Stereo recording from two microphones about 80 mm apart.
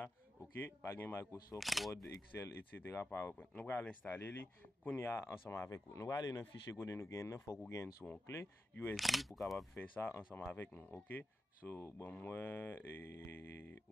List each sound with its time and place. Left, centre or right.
0.6 s speech: left
1.6 s speech: centre
2.0 s speech: left
5.0 s speech: left
8.0 s speech: left
8.9 s speech: centre
9.8 s speech: left